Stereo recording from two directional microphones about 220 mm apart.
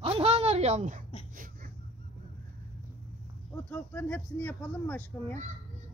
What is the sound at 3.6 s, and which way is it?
Speech, 5° left (ahead or behind).